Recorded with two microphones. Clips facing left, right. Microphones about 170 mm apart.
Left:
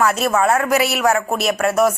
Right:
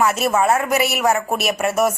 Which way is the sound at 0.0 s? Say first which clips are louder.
Left 1 dB; 5° right (ahead or behind).